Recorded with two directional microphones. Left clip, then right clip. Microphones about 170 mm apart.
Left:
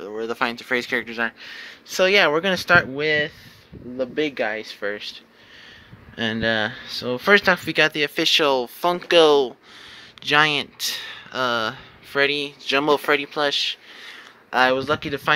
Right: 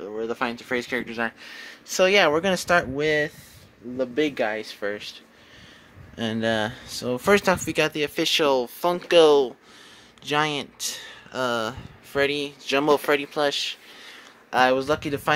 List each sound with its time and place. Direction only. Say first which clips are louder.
0.1 s speech: left 3 dB; 5° right (ahead or behind)
1.1 s speech: left 3 dB; 10° right (ahead or behind)
6.1 s speech: left 3 dB; centre (ahead or behind)
13.9 s a sound: left 4 dB; centre (ahead or behind)